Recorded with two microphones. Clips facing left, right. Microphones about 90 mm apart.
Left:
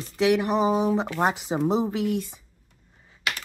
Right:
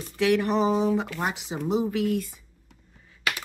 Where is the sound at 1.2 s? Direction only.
40° left (ahead or behind).